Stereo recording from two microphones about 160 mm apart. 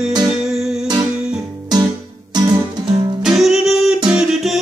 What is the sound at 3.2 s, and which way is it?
Music, centre (ahead or behind).